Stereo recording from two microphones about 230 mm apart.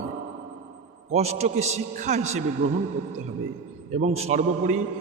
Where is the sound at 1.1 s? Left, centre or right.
Right.